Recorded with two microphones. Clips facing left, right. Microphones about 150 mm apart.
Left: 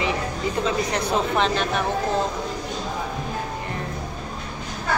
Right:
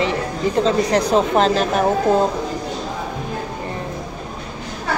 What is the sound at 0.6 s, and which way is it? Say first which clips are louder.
Speech: right 7 dB; 35° right (ahead or behind).